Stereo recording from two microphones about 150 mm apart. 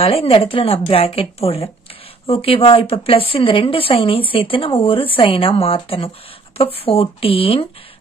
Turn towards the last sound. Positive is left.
turn(degrees=40)  # may be behind; listen again after turning